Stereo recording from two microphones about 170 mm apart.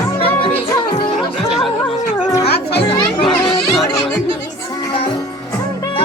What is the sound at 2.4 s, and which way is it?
Children playing, 70° left (ahead or behind).